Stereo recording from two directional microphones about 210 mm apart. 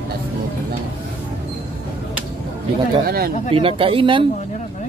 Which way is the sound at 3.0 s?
50° right (ahead or behind).